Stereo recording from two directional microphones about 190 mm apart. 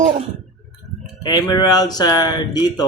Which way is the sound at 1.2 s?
20° left (ahead or behind).